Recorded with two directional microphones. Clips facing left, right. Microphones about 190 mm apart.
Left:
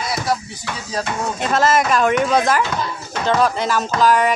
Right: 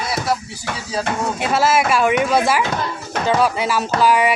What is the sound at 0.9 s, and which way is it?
Speech, 5° right (ahead or behind).